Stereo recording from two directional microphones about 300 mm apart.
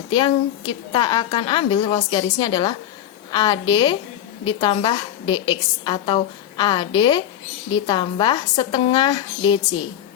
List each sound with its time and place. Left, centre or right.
0.1 s a woman's voice: centre